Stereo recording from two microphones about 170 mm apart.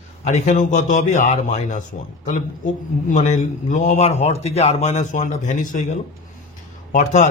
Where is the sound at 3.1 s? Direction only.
50° left (ahead or behind).